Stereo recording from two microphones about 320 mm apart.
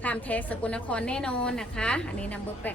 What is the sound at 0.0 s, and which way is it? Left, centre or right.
A woman's voice, centre.